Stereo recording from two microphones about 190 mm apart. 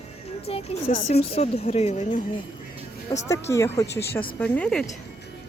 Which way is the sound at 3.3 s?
15° left (ahead or behind).